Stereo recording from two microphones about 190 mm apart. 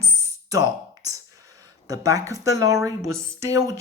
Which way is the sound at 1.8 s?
20° right (ahead or behind).